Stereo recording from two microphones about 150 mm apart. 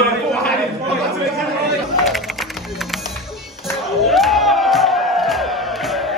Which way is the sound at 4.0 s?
Centre (ahead or behind).